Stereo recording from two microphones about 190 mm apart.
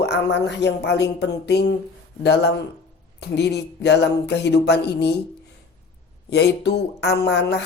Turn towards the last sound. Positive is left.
turn(degrees=60)  # may be behind; listen again after turning